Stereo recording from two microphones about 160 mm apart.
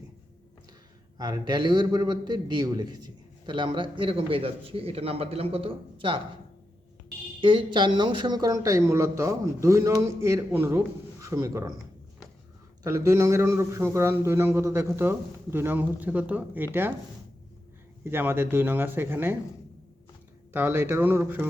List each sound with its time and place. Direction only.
1.2 s a man's voice: 25° right (ahead or behind)
7.4 s speech: 30° right (ahead or behind)
12.8 s a man's voice: 20° right (ahead or behind)
18.0 s a man's voice: 15° right (ahead or behind)
20.5 s a man's voice: 10° right (ahead or behind)